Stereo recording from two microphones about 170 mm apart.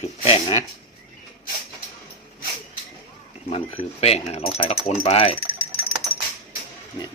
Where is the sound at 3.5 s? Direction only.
35° left (ahead or behind).